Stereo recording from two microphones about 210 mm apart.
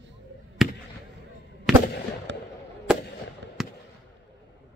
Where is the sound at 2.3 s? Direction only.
60° right (ahead or behind).